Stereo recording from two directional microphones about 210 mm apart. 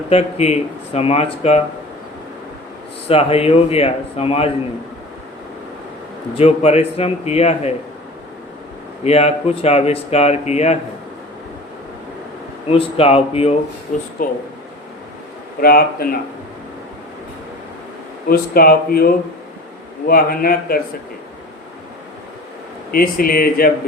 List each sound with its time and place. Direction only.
0.1 s speech: 30° left (ahead or behind)
3.1 s speech: 30° left (ahead or behind)
6.3 s speech: 30° left (ahead or behind)
9.0 s speech: 30° left (ahead or behind)
12.7 s speech: 30° left (ahead or behind)
14.2 s speech: 40° left (ahead or behind)
15.6 s speech: 45° left (ahead or behind)
18.3 s speech: 45° left (ahead or behind)
22.9 s speech: 45° left (ahead or behind)